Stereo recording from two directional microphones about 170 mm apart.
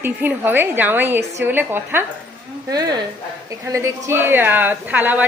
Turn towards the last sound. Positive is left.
turn(degrees=-10)  # may be behind; listen again after turning